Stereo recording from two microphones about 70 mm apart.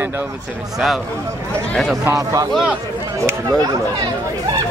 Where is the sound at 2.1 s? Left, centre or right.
Right.